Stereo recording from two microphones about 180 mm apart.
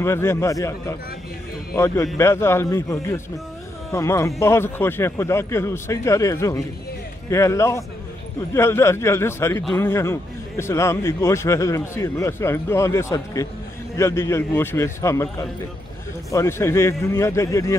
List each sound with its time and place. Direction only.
0.0 s a man's voice: 15° left (ahead or behind)
2.1 s a man's voice: 15° left (ahead or behind)